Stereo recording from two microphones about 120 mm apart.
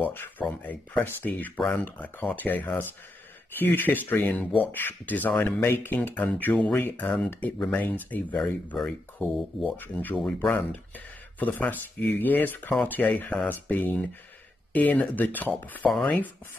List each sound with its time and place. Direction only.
0.0 s speech: 15° left (ahead or behind)